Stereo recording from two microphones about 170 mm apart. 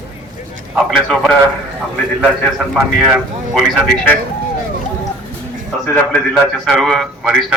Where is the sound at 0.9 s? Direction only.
Centre (ahead or behind).